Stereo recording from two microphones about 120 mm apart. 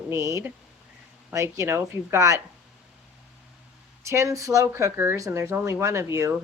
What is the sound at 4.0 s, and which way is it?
Speech, 25° right (ahead or behind).